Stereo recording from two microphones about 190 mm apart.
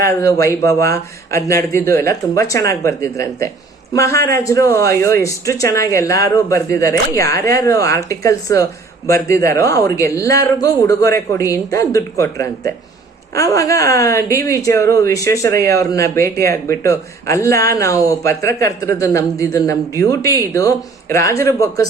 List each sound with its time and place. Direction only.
0.0 s a woman's voice: 15° left (ahead or behind)